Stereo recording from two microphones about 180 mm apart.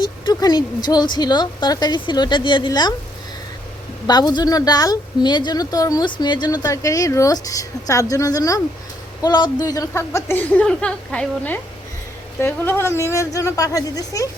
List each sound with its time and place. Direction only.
0.0 s speech: 20° left (ahead or behind)
4.0 s speech: 20° left (ahead or behind)